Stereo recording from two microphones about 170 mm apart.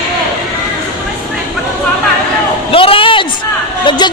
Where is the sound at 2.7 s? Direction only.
30° left (ahead or behind).